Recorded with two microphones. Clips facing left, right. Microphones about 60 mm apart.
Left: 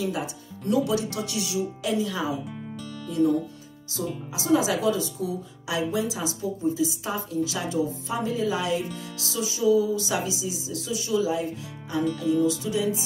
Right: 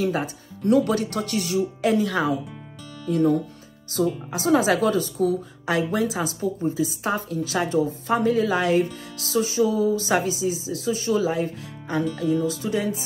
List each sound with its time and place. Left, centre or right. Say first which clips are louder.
0.0 s a woman's voice: right 4 dB; right
4.3 s a woman's voice: right 2 dB; right
12.4 s music: even; right